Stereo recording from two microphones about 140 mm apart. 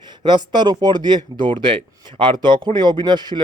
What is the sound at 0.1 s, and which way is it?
A man's voice, 30° right (ahead or behind).